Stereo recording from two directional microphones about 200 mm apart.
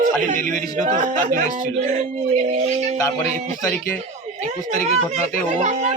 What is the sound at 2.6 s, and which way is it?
Speech, 35° right (ahead or behind).